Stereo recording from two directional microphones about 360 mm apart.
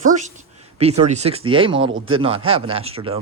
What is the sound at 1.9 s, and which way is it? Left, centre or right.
Speech, right.